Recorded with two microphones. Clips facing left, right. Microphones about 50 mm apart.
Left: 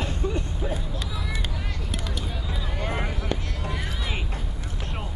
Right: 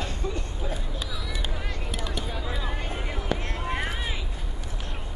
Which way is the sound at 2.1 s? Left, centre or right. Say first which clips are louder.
Right 1 dB; centre.